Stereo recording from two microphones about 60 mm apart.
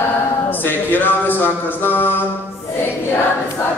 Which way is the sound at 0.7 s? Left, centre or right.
Left.